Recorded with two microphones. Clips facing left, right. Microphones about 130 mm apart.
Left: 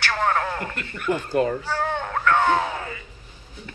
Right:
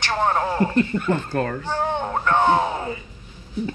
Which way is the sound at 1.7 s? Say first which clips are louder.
Right 2 dB; 20° right (ahead or behind).